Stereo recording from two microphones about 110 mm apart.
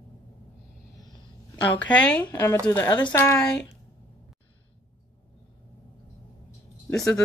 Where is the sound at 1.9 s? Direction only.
10° left (ahead or behind).